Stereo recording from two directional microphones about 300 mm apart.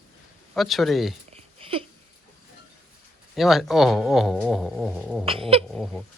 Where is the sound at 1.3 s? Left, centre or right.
Centre.